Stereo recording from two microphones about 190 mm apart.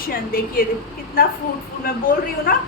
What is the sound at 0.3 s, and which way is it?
Speech, 50° left (ahead or behind).